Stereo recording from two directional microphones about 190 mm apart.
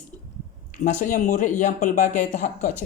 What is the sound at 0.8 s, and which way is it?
Speech, 40° left (ahead or behind).